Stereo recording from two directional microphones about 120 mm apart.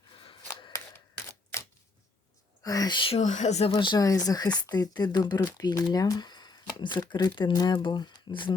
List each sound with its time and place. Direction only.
0.2 s scissors: 40° left (ahead or behind)
0.7 s camera: 20° left (ahead or behind)
2.6 s speech: 35° left (ahead or behind)
3.2 s speech: 75° left (ahead or behind)
3.7 s speech: 40° left (ahead or behind)